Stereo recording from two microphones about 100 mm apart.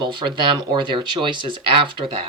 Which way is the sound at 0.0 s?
50° right (ahead or behind).